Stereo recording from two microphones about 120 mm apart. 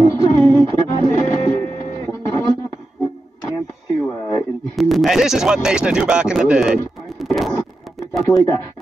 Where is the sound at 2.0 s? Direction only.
15° left (ahead or behind).